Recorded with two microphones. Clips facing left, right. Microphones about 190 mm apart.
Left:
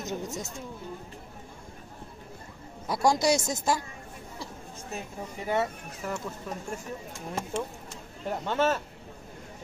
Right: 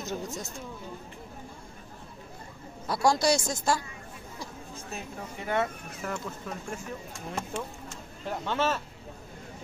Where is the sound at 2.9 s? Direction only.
20° left (ahead or behind).